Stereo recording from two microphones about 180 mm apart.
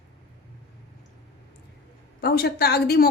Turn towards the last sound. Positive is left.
turn(degrees=60)  # may be behind; listen again after turning